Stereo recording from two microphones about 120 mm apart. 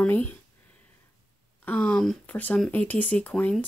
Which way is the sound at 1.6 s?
10° left (ahead or behind).